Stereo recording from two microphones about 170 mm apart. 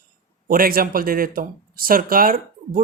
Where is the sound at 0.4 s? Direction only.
55° right (ahead or behind).